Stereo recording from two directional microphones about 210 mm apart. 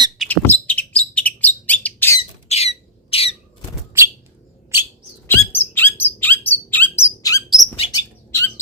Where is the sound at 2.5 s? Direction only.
30° left (ahead or behind).